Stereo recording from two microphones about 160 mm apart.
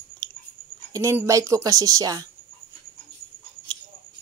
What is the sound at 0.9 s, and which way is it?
A woman's voice, 20° right (ahead or behind).